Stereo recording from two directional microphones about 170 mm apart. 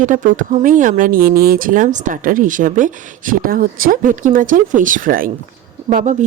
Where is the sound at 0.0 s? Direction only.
50° right (ahead or behind).